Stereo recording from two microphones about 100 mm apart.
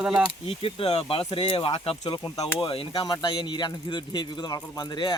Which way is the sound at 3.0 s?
50° left (ahead or behind).